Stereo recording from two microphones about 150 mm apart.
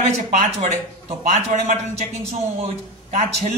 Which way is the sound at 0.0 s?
50° right (ahead or behind).